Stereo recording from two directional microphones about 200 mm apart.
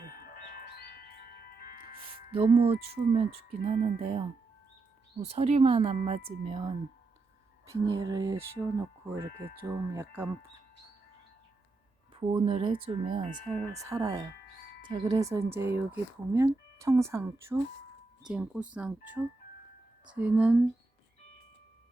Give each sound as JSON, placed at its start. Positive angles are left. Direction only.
{"t": 0.9, "sound": "wind chime", "side_deg": 50}
{"t": 2.3, "sound": "a woman's voice", "side_deg": -25}
{"t": 12.1, "sound": "speech", "side_deg": -30}
{"t": 13.5, "sound": "speech", "side_deg": -15}